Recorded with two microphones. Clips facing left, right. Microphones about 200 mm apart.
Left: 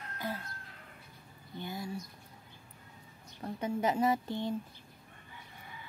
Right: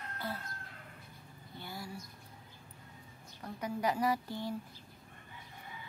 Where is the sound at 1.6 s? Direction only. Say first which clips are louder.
Left 5 dB; 20° left (ahead or behind).